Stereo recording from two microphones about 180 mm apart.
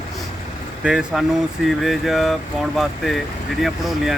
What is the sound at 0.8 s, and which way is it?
Speech, 5° right (ahead or behind).